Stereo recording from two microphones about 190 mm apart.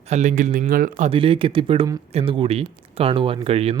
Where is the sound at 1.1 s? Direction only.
30° right (ahead or behind).